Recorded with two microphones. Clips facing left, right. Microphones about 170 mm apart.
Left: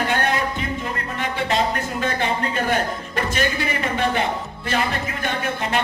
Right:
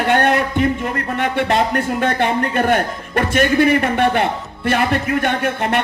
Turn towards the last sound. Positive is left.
turn(degrees=-60)  # may be behind; listen again after turning